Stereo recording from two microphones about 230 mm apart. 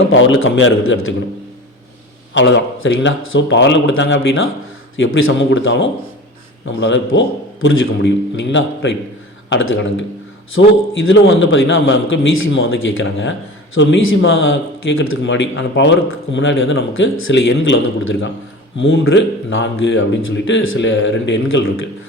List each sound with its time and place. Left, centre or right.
0.0 s a man's voice: left
2.3 s a man's voice: left